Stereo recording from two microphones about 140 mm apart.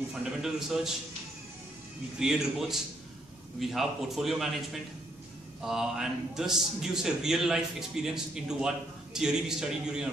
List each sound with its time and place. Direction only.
0.2 s a man's voice: 5° right (ahead or behind)
2.1 s a man's voice: 5° right (ahead or behind)
5.6 s a man's voice: 5° right (ahead or behind)